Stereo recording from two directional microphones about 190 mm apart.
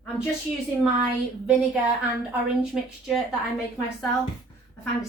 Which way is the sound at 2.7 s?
Centre (ahead or behind).